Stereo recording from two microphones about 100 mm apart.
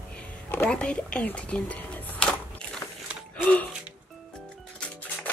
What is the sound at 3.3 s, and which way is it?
Gasp, 15° left (ahead or behind).